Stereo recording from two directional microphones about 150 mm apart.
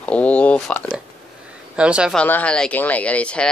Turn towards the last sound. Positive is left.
turn(degrees=10)  # may be behind; listen again after turning